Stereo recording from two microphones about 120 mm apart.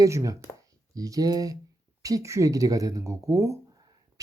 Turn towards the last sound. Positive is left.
turn(degrees=-25)  # may be behind; listen again after turning